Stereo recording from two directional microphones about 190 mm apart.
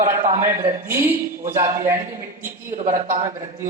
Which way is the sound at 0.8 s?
15° right (ahead or behind).